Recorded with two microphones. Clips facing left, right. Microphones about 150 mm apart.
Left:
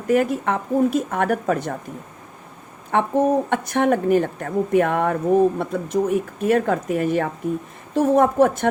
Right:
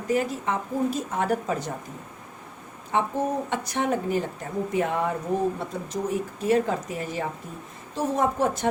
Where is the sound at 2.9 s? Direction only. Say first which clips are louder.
Left 7 dB; 60° left (ahead or behind).